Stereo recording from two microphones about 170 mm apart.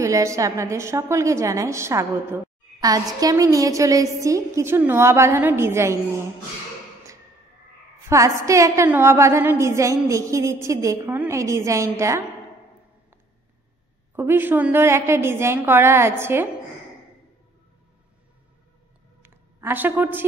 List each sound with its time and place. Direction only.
0.0 s a woman's voice: 20° right (ahead or behind)
8.1 s a woman's voice: 15° right (ahead or behind)
14.1 s a woman's voice: 15° right (ahead or behind)
19.2 s a sound: 10° right (ahead or behind)